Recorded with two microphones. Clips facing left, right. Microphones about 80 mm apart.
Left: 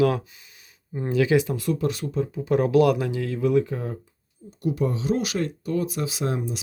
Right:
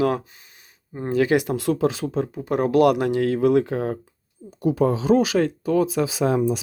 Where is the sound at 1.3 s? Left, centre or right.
Right.